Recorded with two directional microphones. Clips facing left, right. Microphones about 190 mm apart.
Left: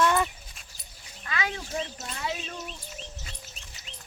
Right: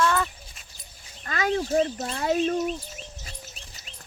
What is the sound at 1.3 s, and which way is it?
Speech, 45° right (ahead or behind).